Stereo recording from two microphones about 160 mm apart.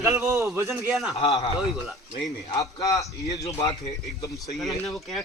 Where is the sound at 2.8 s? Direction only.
20° left (ahead or behind).